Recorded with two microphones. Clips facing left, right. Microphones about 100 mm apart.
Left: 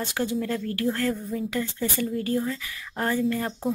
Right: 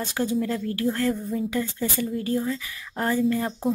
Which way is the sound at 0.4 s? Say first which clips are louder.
Right 2 dB; 20° right (ahead or behind).